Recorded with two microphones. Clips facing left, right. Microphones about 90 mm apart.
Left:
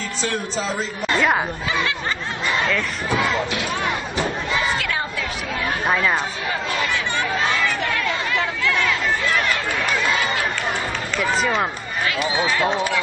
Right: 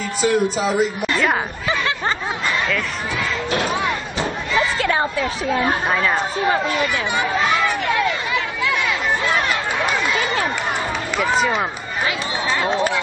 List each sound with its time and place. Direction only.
0.2 s speech: 10° right (ahead or behind)
4.7 s a sound: 30° right (ahead or behind)
5.9 s speech: centre (ahead or behind)